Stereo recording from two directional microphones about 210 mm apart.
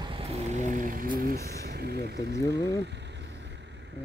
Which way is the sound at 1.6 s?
50° right (ahead or behind).